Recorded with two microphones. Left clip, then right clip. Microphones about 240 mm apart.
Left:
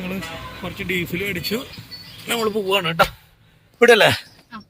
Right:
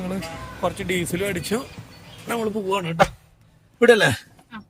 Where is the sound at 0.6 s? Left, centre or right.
Right.